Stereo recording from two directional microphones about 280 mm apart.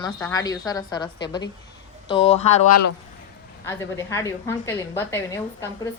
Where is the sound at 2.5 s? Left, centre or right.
Left.